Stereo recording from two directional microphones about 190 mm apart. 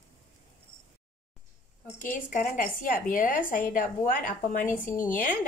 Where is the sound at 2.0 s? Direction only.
45° left (ahead or behind).